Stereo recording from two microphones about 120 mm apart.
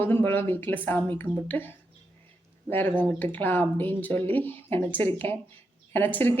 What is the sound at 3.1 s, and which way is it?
Speech, 15° left (ahead or behind).